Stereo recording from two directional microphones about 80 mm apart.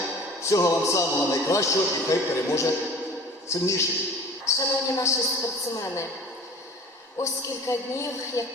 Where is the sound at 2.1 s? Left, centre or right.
Left.